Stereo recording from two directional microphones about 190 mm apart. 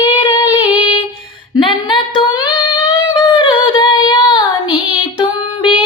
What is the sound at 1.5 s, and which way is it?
Singing, 25° left (ahead or behind).